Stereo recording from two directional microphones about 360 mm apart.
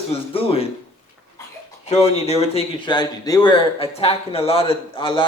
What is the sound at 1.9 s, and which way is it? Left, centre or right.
Speech, centre.